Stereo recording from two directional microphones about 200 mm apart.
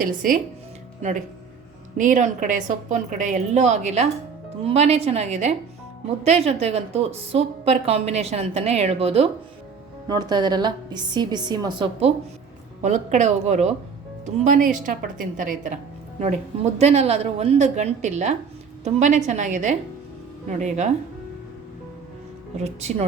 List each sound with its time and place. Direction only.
0.0 s speech: 45° right (ahead or behind)
2.0 s a woman's voice: 40° right (ahead or behind)
16.7 s a woman's voice: 30° right (ahead or behind)
22.6 s a woman's voice: 30° right (ahead or behind)